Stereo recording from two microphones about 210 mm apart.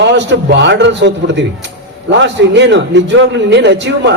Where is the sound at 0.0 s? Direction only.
55° right (ahead or behind).